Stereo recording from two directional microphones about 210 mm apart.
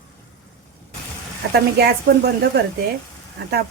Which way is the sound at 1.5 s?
50° right (ahead or behind).